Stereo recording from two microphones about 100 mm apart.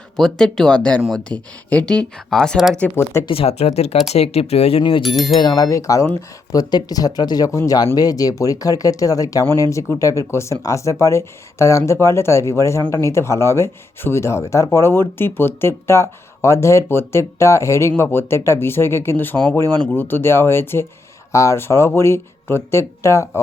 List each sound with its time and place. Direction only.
0.2 s speech: 5° left (ahead or behind)
2.9 s speech: 30° left (ahead or behind)
3.2 s speech: 80° left
4.8 s speech: 55° left (ahead or behind)
5.2 s speech: 45° left (ahead or behind); by 23.4 s 30° left (ahead or behind)